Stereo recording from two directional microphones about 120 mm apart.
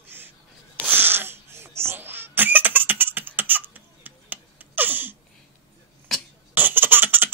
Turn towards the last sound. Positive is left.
turn(degrees=-15)  # may be behind; listen again after turning